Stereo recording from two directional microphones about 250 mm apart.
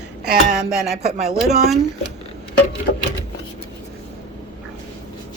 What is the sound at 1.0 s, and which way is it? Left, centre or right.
Speech, right.